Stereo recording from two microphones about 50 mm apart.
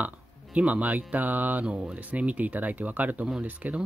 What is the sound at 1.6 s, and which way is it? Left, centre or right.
Speech, centre.